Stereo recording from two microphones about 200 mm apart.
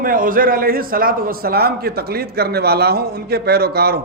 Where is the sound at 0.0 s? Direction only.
45° right (ahead or behind).